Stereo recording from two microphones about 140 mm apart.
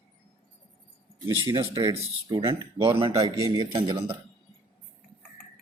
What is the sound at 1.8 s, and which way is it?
A man's voice, 25° right (ahead or behind).